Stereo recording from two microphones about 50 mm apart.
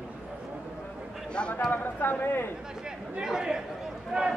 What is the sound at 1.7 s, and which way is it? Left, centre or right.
Speech, left.